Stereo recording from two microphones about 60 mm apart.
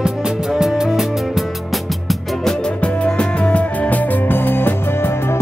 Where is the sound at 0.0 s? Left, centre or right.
Centre.